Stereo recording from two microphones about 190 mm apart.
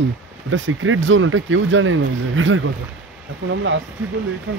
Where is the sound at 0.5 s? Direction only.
85° right.